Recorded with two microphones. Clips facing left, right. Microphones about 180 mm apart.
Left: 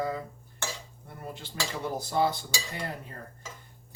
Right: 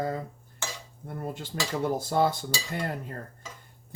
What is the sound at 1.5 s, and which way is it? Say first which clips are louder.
Speech: right 5 dB; 45° right (ahead or behind).